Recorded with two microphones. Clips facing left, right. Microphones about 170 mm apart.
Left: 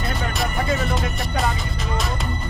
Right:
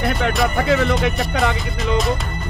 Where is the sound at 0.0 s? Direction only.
70° right (ahead or behind).